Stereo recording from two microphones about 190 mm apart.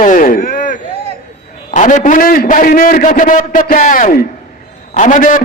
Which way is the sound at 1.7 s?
40° left (ahead or behind).